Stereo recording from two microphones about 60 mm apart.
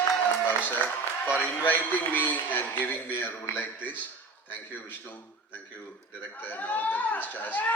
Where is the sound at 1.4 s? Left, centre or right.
Left.